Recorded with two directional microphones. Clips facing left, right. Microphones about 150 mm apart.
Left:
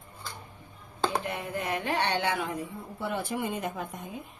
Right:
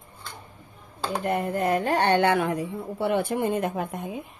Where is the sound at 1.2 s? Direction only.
45° right (ahead or behind).